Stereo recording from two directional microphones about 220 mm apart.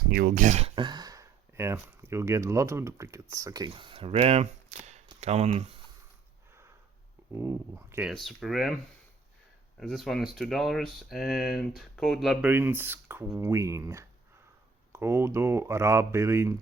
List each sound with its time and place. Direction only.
0.1 s speech: 40° right (ahead or behind)
7.3 s speech: 10° right (ahead or behind)
8.1 s speech: centre (ahead or behind)
9.8 s speech: centre (ahead or behind)